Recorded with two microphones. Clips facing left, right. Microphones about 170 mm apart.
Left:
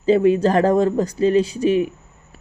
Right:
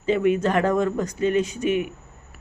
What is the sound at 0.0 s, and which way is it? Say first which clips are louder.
Speech: left 5 dB; 35° left (ahead or behind).